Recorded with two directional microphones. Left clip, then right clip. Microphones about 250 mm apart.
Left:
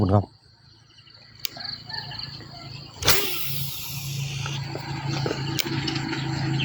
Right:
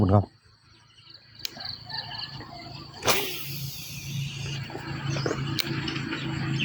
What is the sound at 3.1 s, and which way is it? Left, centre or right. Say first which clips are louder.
Vehicle: left 3 dB; left.